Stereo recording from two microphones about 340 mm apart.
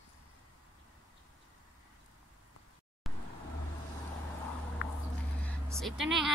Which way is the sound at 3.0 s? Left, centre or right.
Centre.